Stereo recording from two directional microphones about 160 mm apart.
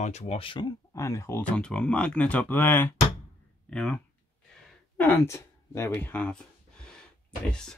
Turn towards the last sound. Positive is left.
turn(degrees=5)  # may be behind; listen again after turning